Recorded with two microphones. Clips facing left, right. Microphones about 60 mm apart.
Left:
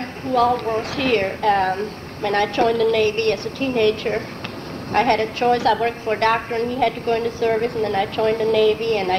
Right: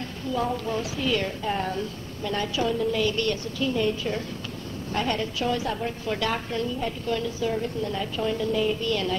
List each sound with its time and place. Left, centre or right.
0.3 s speech: left
0.7 s a woman's voice: left
1.4 s a woman's voice: left
3.1 s a woman's voice: left
6.0 s a woman's voice: left
8.8 s a woman's voice: left